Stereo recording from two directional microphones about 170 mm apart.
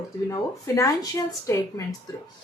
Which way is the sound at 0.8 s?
20° left (ahead or behind).